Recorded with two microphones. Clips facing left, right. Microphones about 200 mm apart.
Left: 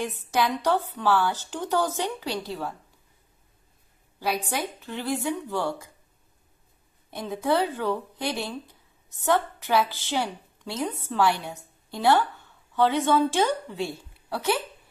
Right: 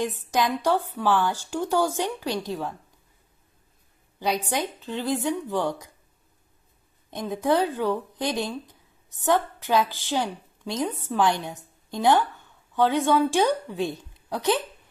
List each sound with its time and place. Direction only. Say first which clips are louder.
0.3 s a woman's voice: even; 15° right (ahead or behind)
4.2 s a woman's voice: right 2 dB; 20° right (ahead or behind)
7.1 s a woman's voice: right 2 dB; 15° right (ahead or behind)